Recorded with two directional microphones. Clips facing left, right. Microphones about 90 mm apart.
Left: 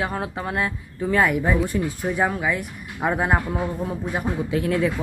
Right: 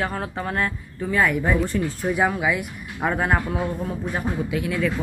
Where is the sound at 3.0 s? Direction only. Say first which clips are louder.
Left 1 dB; 10° left (ahead or behind).